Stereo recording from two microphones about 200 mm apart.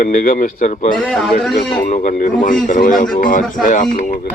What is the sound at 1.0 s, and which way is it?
Speech, centre (ahead or behind).